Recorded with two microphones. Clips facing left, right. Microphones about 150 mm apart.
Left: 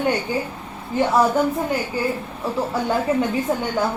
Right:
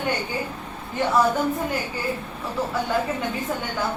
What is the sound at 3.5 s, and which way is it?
Speech, 35° left (ahead or behind).